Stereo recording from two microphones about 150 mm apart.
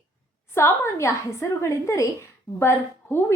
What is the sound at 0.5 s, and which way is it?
A woman's voice, 20° left (ahead or behind).